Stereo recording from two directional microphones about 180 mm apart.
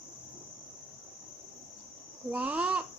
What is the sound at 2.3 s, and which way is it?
Speech, 10° right (ahead or behind).